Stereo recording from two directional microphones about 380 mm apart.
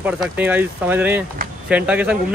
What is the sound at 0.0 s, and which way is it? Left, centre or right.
A man's voice, centre.